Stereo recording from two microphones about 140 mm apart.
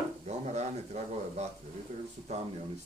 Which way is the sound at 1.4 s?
50° right (ahead or behind).